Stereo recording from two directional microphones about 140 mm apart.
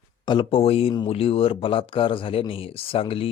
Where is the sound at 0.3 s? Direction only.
40° left (ahead or behind).